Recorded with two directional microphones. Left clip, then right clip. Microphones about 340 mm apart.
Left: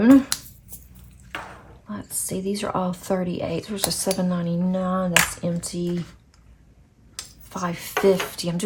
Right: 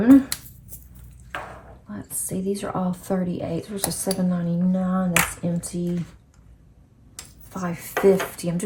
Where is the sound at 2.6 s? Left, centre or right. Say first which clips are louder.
Left 3 dB; centre.